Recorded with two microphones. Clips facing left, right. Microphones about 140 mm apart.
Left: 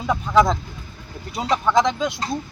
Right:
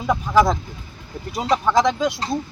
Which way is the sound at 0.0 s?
Centre (ahead or behind).